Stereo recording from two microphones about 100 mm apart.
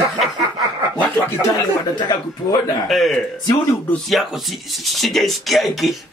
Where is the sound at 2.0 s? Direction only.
45° left (ahead or behind).